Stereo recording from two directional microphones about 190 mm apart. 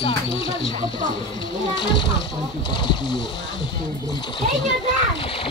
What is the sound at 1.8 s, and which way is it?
Speech, 25° left (ahead or behind).